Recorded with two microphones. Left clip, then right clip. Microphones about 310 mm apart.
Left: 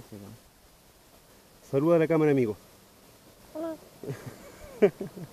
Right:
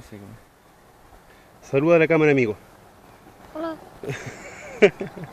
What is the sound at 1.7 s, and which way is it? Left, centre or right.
Speech, centre.